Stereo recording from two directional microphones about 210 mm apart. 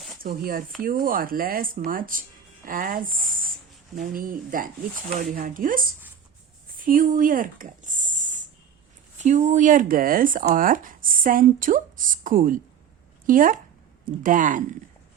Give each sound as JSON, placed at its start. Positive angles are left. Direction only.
{"t": 0.2, "sound": "speech", "side_deg": -45}
{"t": 6.7, "sound": "a sound", "side_deg": -40}
{"t": 9.1, "sound": "speech", "side_deg": -35}